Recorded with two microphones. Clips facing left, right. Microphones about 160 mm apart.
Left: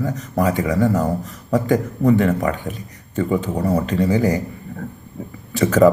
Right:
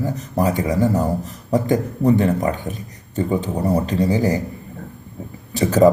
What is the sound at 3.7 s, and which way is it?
Speech, 35° right (ahead or behind).